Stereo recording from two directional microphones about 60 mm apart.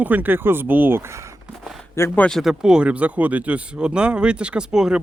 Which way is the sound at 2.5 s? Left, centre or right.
Centre.